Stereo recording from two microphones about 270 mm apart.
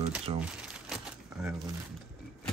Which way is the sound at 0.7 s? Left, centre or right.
Centre.